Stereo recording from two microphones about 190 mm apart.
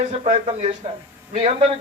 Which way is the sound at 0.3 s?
35° right (ahead or behind).